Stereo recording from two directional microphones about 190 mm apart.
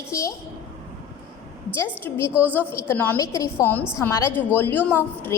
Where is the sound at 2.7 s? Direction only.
10° left (ahead or behind).